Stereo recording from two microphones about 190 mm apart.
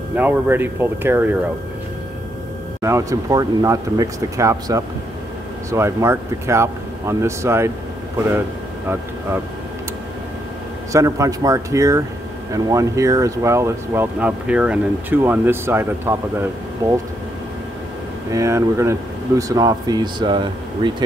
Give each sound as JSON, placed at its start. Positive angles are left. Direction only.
{"t": 0.1, "sound": "speech", "side_deg": -10}
{"t": 2.8, "sound": "speech", "side_deg": -15}
{"t": 10.9, "sound": "speech", "side_deg": -15}
{"t": 18.3, "sound": "speech", "side_deg": -15}